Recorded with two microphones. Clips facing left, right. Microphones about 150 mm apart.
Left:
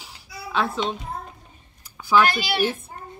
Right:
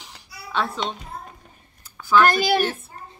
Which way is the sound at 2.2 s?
45° right (ahead or behind).